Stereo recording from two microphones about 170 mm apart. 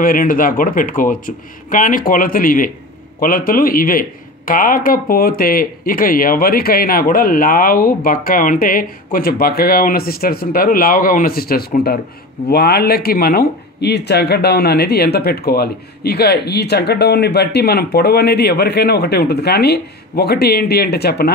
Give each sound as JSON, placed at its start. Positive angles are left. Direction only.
{"t": 0.0, "sound": "speech", "side_deg": 55}